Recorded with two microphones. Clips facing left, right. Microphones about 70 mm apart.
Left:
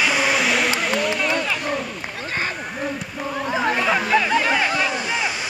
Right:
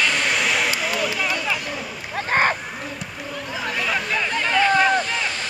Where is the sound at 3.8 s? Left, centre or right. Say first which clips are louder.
Left 2 dB; centre.